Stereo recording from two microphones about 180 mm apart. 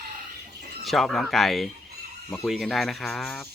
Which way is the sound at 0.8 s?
Centre (ahead or behind).